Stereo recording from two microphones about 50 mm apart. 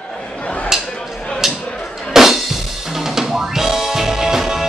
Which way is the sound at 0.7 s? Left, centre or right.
Centre.